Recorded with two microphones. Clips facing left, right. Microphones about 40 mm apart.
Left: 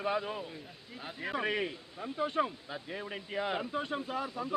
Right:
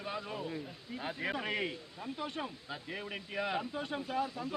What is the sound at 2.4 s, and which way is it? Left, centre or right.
Speech, left.